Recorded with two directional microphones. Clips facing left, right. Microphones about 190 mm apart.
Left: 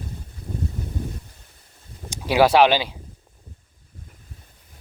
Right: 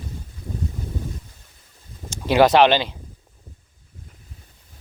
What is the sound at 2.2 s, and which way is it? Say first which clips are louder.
Speech: right 1 dB; 10° left (ahead or behind).